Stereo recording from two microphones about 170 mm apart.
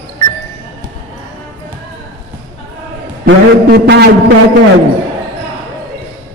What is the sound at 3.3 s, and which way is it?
Speech, 80° right.